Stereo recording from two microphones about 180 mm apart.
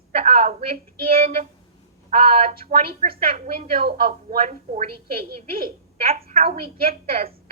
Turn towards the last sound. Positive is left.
turn(degrees=-55)  # may be behind; listen again after turning